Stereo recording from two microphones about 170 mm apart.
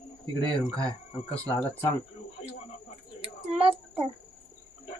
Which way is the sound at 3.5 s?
35° right (ahead or behind).